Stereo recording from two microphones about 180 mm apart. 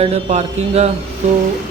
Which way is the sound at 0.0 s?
40° right (ahead or behind).